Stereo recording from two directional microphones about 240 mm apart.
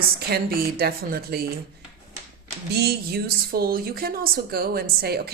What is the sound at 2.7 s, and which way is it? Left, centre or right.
A woman's voice, right.